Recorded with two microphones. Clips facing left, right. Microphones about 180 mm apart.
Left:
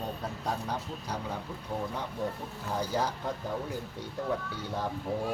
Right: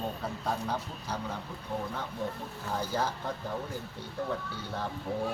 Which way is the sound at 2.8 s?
15° left (ahead or behind).